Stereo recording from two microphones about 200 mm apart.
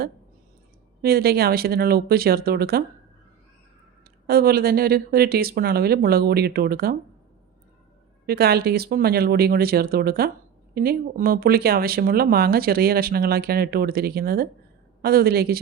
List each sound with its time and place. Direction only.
1.0 s speech: 50° right (ahead or behind)
4.3 s speech: 50° right (ahead or behind)
8.3 s speech: 50° right (ahead or behind)